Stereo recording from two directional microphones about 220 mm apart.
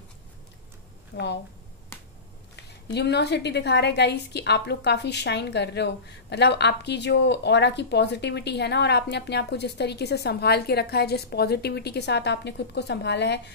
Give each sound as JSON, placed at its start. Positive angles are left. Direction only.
{"t": 1.1, "sound": "a woman's voice", "side_deg": 50}
{"t": 2.5, "sound": "a woman's voice", "side_deg": 50}